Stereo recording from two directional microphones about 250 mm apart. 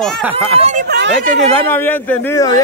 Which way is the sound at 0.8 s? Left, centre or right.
Right.